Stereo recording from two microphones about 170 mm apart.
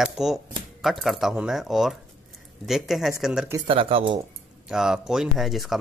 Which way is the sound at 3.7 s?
30° right (ahead or behind).